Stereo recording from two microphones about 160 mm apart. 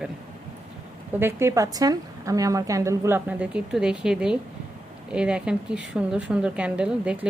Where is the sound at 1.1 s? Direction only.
15° right (ahead or behind).